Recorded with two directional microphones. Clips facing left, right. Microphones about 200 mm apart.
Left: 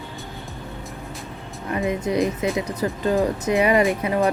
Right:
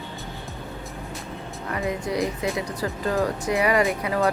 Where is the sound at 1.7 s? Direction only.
20° left (ahead or behind).